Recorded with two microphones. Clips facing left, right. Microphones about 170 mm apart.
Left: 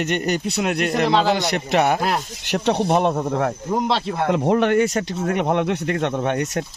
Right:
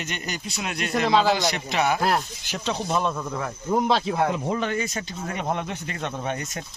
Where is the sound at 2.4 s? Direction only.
65° left (ahead or behind).